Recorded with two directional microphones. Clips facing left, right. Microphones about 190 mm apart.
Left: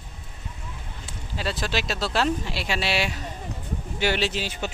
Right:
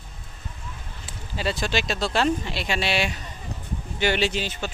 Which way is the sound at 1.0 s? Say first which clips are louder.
Right 2 dB; centre (ahead or behind).